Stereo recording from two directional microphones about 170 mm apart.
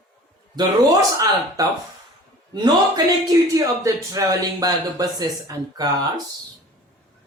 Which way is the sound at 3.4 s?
20° right (ahead or behind).